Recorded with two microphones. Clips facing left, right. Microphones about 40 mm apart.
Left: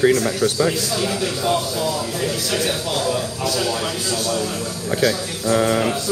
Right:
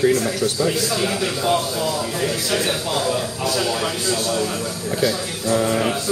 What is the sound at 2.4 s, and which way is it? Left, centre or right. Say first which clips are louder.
Speech: even; right.